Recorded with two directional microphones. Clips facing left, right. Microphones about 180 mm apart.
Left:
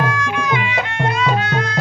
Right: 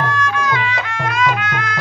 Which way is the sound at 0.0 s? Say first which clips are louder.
Right 1 dB; 10° left (ahead or behind).